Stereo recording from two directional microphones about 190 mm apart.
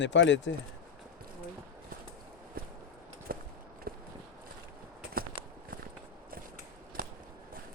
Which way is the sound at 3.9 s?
50° right (ahead or behind).